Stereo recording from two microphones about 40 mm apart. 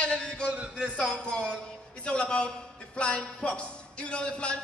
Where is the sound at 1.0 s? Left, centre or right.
Left.